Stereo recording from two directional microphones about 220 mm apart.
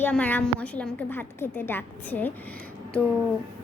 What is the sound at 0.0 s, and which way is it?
A woman's voice, 5° left (ahead or behind).